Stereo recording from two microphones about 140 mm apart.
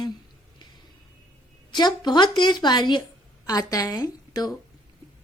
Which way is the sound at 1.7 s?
30° left (ahead or behind).